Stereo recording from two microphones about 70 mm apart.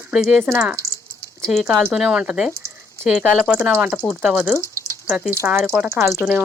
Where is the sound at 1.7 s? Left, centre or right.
Right.